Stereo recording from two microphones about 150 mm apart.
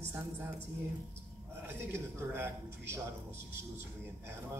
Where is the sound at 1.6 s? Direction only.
15° right (ahead or behind).